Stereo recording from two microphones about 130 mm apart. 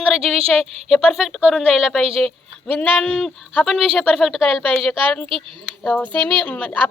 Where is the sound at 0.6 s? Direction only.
Centre (ahead or behind).